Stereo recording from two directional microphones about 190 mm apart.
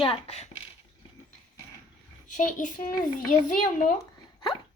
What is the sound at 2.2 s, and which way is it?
A child's voice, 40° left (ahead or behind).